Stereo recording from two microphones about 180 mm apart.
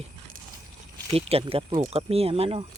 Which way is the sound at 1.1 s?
30° right (ahead or behind).